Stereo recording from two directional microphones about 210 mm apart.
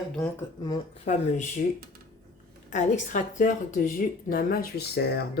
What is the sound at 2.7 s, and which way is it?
Speech, 35° left (ahead or behind).